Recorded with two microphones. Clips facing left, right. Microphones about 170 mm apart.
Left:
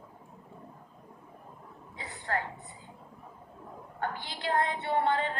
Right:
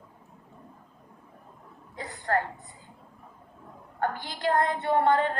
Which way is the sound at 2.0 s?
45° right (ahead or behind).